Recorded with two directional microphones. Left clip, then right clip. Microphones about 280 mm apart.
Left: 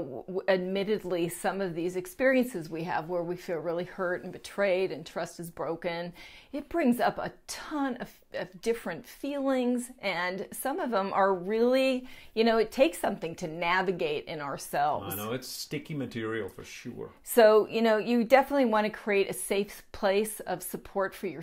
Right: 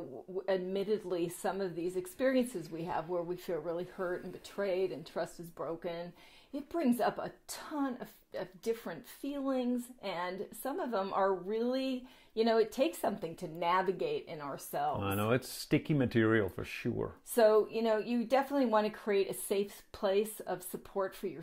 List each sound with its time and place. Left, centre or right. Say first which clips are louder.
0.4 s a woman's voice: left 6 dB; left
15.1 s speech: right 2 dB; right
17.3 s a woman's voice: left 6 dB; left